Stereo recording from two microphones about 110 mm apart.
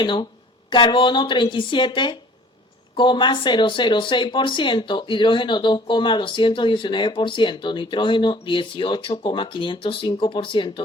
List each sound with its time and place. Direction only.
0.0 s speech: 45° left (ahead or behind)